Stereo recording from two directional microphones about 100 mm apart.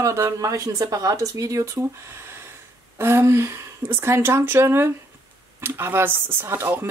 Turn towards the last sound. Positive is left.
turn(degrees=-25)  # may be behind; listen again after turning